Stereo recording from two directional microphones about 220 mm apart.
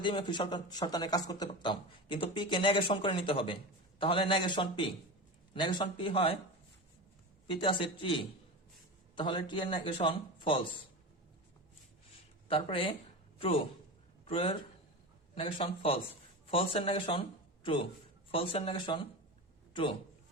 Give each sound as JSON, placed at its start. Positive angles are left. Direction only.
{"t": 0.0, "sound": "a man's voice", "side_deg": 20}
{"t": 7.4, "sound": "a man's voice", "side_deg": 20}
{"t": 12.5, "sound": "a man's voice", "side_deg": 25}
{"t": 14.3, "sound": "a man's voice", "side_deg": 25}